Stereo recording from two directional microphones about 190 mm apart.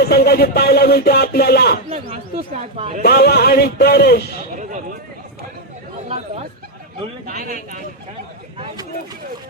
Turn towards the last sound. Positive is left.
turn(degrees=-50)  # may be behind; listen again after turning